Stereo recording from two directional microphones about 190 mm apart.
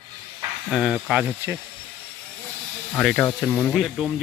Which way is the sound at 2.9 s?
5° left (ahead or behind).